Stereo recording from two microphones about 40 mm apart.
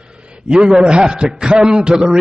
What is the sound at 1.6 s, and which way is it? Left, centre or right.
Speech, centre.